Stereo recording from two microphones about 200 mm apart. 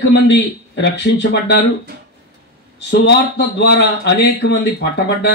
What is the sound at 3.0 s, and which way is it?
A man's voice, 60° left (ahead or behind).